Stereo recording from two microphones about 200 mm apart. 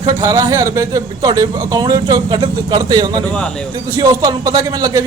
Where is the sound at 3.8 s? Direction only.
20° right (ahead or behind).